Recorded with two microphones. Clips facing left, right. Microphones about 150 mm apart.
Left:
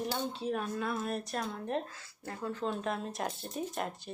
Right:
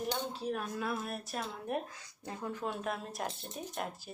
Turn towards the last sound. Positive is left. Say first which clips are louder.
# left 4 dB
turn(degrees=0)  # may be behind; listen again after turning